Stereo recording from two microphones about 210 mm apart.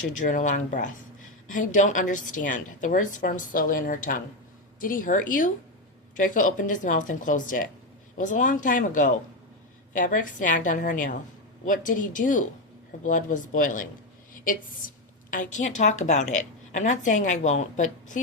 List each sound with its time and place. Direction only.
0.2 s a woman's voice: 35° left (ahead or behind)
15.3 s a woman's voice: 35° left (ahead or behind)